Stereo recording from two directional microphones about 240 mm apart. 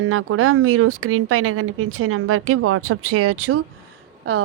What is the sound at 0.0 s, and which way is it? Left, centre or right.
Speech, right.